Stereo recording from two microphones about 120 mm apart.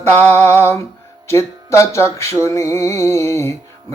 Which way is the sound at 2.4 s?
25° left (ahead or behind).